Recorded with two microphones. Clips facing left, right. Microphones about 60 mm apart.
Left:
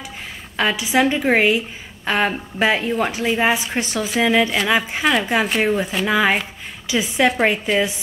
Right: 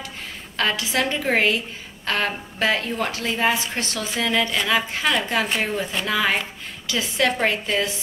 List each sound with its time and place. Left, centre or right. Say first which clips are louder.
0.6 s a woman's voice: left 5 dB; centre